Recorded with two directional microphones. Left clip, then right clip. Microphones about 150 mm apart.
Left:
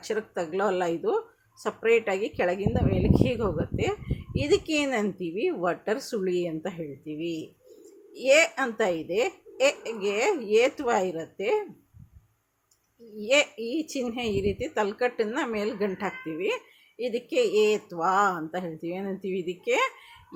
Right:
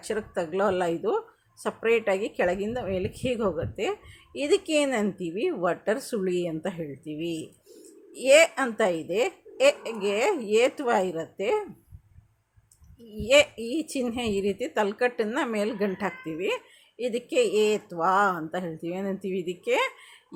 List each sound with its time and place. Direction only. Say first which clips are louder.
0.0 s a woman's voice: even; 10° right (ahead or behind)
13.1 s a woman's voice: right 3 dB; 15° right (ahead or behind)